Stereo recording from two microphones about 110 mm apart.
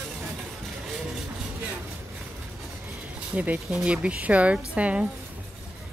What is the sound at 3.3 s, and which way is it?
Speech, 10° right (ahead or behind).